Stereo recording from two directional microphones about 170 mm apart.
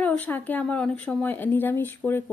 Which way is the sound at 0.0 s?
10° left (ahead or behind).